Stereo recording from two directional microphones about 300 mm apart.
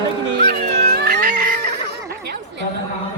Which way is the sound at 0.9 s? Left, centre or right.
Right.